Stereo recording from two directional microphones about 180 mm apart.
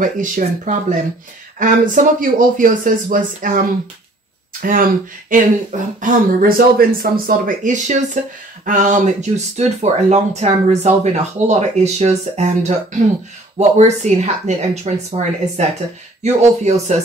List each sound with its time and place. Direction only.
0.0 s speech: 45° right (ahead or behind)
4.6 s speech: 50° right (ahead or behind)